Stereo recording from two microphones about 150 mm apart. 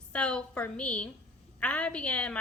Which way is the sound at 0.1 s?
5° left (ahead or behind).